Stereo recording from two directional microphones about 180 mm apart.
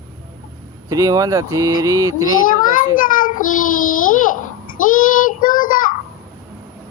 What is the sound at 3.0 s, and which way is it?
A child's voice, 50° left (ahead or behind).